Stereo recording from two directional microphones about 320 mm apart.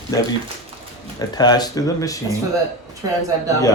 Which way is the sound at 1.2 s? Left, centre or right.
Centre.